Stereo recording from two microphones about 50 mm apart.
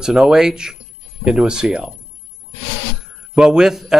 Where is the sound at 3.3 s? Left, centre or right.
Centre.